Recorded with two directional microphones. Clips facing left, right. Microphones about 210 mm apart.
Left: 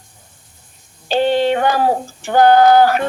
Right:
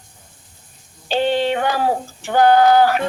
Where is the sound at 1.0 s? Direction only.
45° left (ahead or behind).